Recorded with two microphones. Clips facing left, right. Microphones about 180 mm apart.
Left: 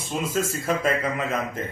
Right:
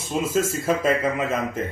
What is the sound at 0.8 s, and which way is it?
Speech, 25° right (ahead or behind).